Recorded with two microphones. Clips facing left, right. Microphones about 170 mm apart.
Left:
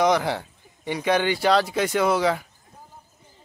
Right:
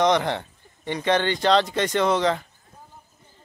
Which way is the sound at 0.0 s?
5° left (ahead or behind).